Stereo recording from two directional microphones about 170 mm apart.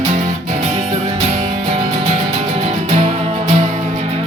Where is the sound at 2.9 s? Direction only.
40° right (ahead or behind).